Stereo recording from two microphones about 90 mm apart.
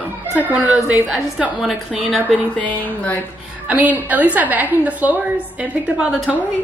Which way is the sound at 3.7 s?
20° right (ahead or behind).